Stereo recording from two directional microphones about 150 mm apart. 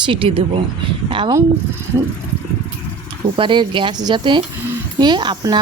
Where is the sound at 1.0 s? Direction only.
35° right (ahead or behind).